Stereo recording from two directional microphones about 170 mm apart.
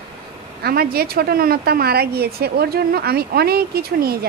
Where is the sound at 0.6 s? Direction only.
65° right (ahead or behind).